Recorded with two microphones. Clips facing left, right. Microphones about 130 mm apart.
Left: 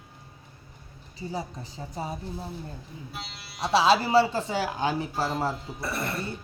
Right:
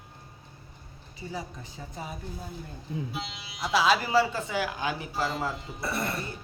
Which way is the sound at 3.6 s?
30° left (ahead or behind).